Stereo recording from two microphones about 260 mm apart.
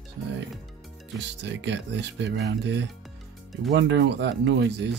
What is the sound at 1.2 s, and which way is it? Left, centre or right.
Speech, right.